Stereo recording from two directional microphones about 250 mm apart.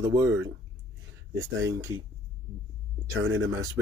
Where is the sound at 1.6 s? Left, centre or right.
Centre.